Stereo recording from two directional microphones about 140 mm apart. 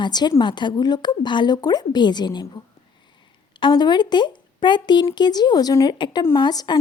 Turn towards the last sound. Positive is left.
turn(degrees=30)  # may be behind; listen again after turning